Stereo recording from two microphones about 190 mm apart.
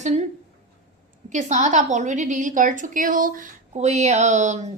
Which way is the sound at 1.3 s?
40° right (ahead or behind).